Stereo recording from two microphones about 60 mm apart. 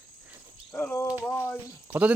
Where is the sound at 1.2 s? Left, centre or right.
Left.